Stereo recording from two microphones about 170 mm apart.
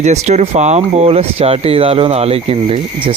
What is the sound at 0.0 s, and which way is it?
Speech, 40° right (ahead or behind).